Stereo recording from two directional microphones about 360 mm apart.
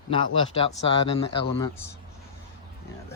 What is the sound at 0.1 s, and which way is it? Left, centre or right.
Speech, centre.